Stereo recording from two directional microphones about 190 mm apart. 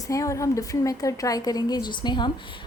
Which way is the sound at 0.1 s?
15° left (ahead or behind).